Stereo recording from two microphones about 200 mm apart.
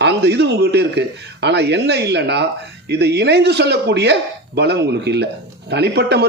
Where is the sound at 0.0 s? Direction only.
55° right (ahead or behind).